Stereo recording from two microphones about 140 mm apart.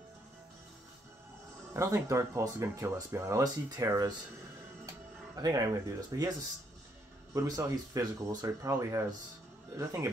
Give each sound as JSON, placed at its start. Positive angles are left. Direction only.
{"t": 1.7, "sound": "speech", "side_deg": -20}
{"t": 7.3, "sound": "speech", "side_deg": -25}